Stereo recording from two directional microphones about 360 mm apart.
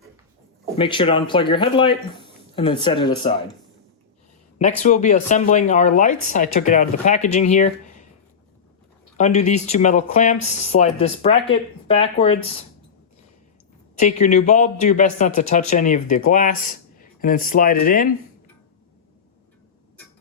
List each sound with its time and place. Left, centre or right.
0.8 s speech: centre
4.8 s speech: centre
9.1 s speech: centre
13.9 s speech: centre